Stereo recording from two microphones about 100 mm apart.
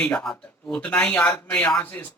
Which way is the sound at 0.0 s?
10° left (ahead or behind).